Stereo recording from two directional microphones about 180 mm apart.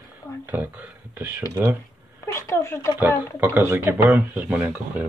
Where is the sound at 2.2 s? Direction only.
15° left (ahead or behind).